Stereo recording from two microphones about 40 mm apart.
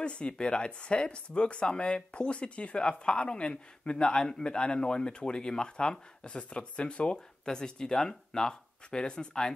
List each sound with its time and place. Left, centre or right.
0.0 s speech: left
7.4 s speech: centre